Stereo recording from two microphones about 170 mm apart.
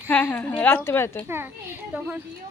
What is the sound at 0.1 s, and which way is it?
A woman's voice, 10° left (ahead or behind).